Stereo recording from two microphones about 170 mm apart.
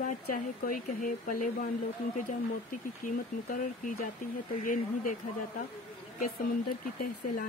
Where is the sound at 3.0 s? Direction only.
50° left (ahead or behind).